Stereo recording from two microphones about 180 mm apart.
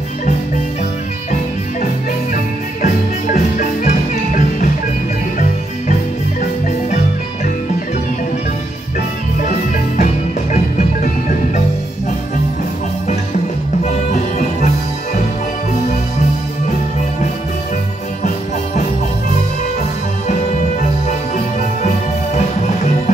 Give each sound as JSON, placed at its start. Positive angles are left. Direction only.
{"t": 2.3, "sound": "music", "side_deg": 45}
{"t": 9.4, "sound": "music", "side_deg": 45}
{"t": 13.8, "sound": "music", "side_deg": 45}
{"t": 21.5, "sound": "music", "side_deg": 45}